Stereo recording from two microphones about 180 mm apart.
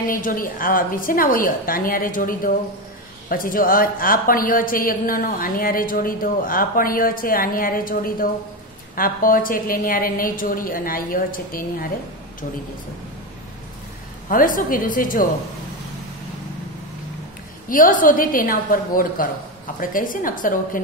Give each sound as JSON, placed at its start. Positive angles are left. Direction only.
{"t": 0.1, "sound": "a woman's voice", "side_deg": 50}
{"t": 14.3, "sound": "a woman's voice", "side_deg": 50}
{"t": 17.6, "sound": "a woman's voice", "side_deg": 50}